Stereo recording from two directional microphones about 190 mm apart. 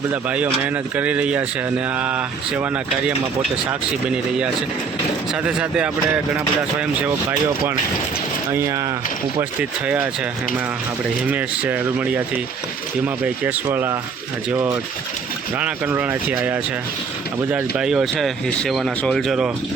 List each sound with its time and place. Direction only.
0.1 s speech: 5° right (ahead or behind)
5.3 s speech: 5° right (ahead or behind)
11.3 s speech: 10° right (ahead or behind)
13.2 s speech: 10° right (ahead or behind)